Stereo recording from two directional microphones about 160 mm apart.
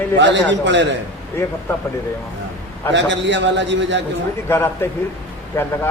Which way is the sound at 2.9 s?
90° right.